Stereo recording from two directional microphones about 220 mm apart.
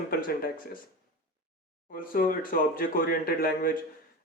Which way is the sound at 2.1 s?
40° left (ahead or behind).